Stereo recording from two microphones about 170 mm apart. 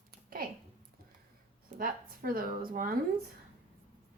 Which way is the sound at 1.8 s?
55° right (ahead or behind).